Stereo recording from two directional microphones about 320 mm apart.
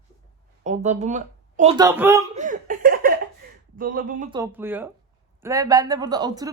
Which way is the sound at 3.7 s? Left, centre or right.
Right.